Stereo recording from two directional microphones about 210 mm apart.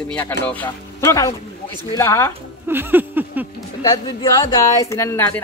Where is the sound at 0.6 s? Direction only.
15° left (ahead or behind).